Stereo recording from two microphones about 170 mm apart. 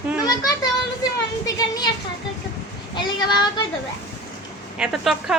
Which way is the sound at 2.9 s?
25° left (ahead or behind).